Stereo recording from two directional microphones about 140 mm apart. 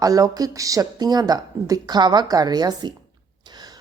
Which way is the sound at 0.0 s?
25° right (ahead or behind).